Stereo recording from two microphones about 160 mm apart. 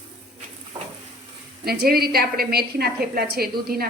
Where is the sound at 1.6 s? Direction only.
75° right (ahead or behind).